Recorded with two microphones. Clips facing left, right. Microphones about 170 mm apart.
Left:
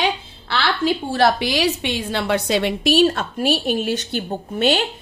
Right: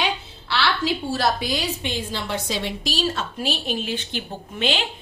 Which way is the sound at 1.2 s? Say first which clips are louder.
Left 9 dB; 80° left.